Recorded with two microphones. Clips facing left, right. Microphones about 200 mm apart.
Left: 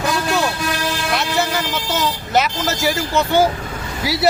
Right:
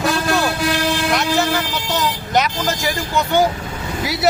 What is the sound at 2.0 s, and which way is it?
Speech, 5° left (ahead or behind).